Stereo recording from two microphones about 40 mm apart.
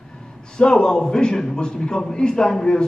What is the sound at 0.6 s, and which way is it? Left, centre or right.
A man's voice, centre.